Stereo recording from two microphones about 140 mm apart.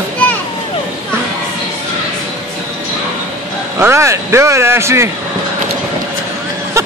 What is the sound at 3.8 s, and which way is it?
Speech, 20° right (ahead or behind).